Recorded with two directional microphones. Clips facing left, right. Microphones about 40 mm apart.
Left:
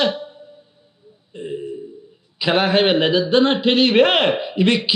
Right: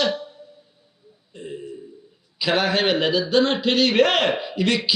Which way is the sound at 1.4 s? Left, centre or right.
Left.